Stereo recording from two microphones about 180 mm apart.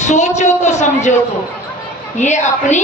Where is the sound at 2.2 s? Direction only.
40° left (ahead or behind).